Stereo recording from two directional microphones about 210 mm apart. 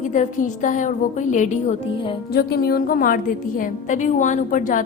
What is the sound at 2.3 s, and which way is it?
A woman's voice, 50° left (ahead or behind).